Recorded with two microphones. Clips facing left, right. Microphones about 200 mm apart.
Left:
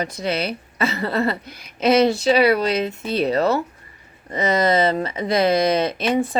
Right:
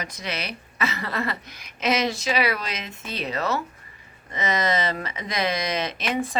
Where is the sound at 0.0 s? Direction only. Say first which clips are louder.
Left 9 dB; 30° left (ahead or behind).